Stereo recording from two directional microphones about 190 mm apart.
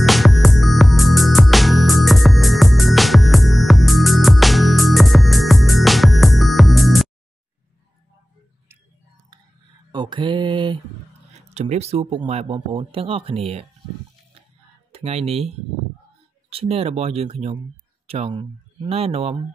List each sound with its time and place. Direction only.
0.0 s music: centre (ahead or behind)
9.9 s mantra: 25° right (ahead or behind)
11.5 s speech: 35° right (ahead or behind)
14.9 s speech: 30° right (ahead or behind)